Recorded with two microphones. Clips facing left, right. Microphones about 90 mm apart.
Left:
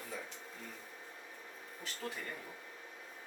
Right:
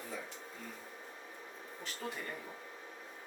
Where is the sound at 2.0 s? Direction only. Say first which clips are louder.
Right 1 dB; 15° right (ahead or behind).